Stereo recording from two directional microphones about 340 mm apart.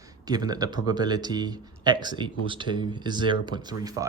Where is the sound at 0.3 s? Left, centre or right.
Centre.